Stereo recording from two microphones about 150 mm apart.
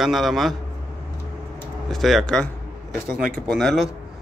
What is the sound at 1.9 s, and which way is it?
Speech, centre (ahead or behind).